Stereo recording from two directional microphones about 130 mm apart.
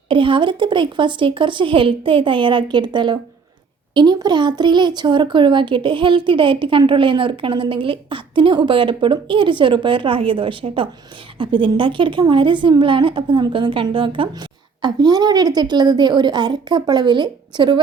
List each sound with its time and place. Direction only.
0.1 s speech: 40° right (ahead or behind)